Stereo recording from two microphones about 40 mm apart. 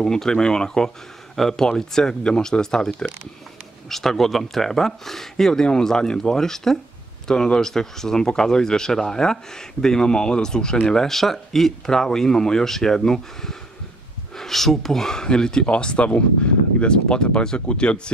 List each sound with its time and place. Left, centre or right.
0.0 s speech: centre
3.9 s speech: centre
5.5 s speech: centre